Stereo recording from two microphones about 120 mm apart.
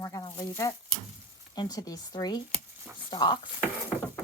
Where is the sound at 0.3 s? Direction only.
30° left (ahead or behind).